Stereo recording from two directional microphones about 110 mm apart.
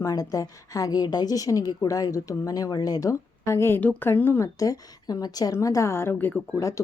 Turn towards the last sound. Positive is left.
turn(degrees=25)  # may be behind; listen again after turning